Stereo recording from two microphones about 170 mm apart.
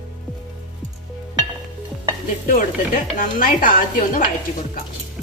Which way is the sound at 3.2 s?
55° left (ahead or behind).